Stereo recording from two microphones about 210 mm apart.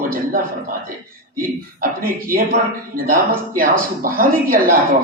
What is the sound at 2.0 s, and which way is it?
Speech, 40° right (ahead or behind).